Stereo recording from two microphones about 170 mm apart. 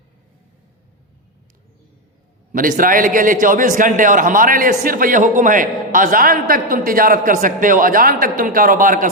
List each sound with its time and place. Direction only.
2.5 s a man's voice: 55° right (ahead or behind)